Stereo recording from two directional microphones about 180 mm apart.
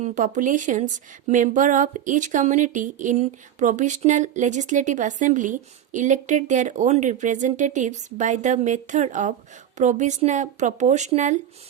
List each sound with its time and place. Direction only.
0.0 s speech: 45° right (ahead or behind)